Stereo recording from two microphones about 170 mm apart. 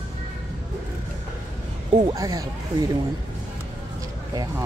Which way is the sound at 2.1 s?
20° right (ahead or behind).